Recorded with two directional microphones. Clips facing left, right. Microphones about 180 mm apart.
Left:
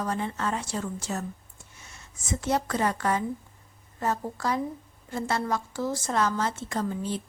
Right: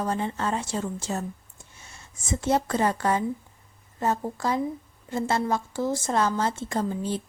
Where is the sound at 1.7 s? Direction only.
30° right (ahead or behind).